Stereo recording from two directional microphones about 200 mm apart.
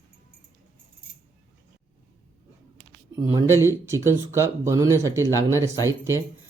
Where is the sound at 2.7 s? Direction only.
15° right (ahead or behind).